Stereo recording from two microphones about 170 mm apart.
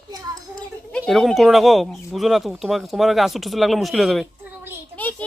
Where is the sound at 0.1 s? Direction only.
20° right (ahead or behind).